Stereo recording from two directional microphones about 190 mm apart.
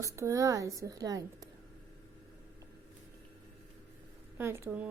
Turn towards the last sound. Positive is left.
turn(degrees=-10)  # may be behind; listen again after turning